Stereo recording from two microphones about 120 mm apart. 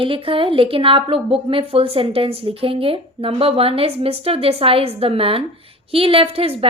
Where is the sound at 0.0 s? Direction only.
50° right (ahead or behind).